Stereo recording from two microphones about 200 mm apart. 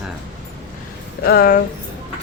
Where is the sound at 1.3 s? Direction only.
45° left (ahead or behind).